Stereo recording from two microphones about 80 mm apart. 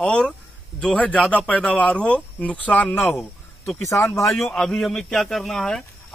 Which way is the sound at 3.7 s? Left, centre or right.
Left.